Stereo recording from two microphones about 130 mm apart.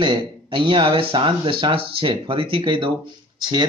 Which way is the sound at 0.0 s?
40° right (ahead or behind).